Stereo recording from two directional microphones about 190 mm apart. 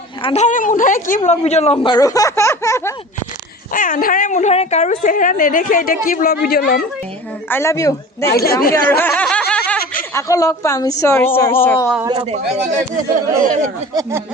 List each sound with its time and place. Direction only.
0.2 s a sound: 30° left (ahead or behind)
0.4 s a woman's voice: 45° left (ahead or behind); by 2.9 s 15° left (ahead or behind)
3.7 s a woman's voice: 45° left (ahead or behind)
7.5 s a woman's voice: 15° left (ahead or behind)
8.3 s speech: 55° left (ahead or behind)
8.7 s snicker: 10° left (ahead or behind)
10.2 s a woman's voice: 15° left (ahead or behind)
12.0 s speech: 20° right (ahead or behind)